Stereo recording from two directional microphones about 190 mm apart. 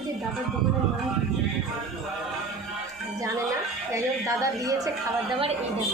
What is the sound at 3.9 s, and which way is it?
Speech, 15° right (ahead or behind).